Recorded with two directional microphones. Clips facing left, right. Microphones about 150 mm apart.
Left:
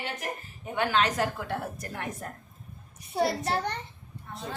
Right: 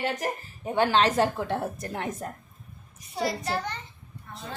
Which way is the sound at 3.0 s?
60° left (ahead or behind).